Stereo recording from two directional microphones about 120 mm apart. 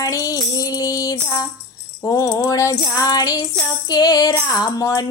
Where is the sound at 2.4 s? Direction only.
25° left (ahead or behind).